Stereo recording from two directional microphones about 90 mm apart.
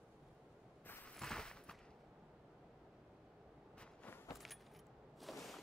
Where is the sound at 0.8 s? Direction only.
20° left (ahead or behind).